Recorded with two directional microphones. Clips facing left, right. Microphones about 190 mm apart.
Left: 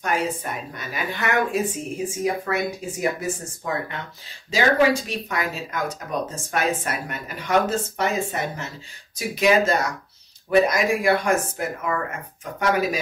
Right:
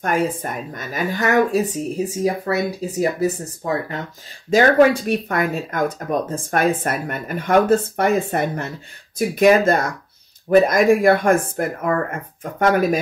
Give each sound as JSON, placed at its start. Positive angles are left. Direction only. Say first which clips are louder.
{"t": 0.0, "sound": "speech", "louder": "right 4 dB", "side_deg": -55}
{"t": 4.5, "sound": "speech", "louder": "right 6 dB", "side_deg": -50}